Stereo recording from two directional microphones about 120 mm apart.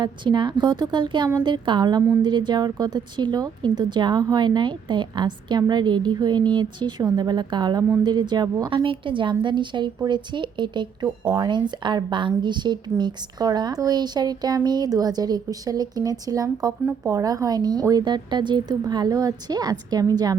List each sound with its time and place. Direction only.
0.0 s a woman's voice: 40° right (ahead or behind)
8.8 s a woman's voice: 45° right (ahead or behind)